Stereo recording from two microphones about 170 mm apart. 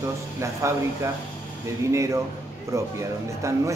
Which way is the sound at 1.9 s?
20° right (ahead or behind).